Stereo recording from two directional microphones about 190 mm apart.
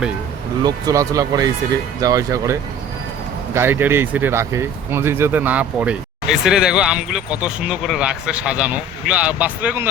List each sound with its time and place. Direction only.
0.6 s speech: 20° right (ahead or behind)